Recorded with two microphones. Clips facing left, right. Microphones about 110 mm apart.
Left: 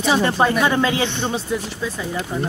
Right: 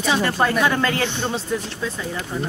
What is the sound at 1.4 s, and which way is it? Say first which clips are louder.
Speech: left 1 dB; 10° left (ahead or behind).